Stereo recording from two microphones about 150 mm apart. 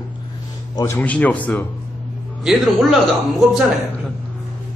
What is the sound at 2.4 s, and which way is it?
Speech, centre (ahead or behind).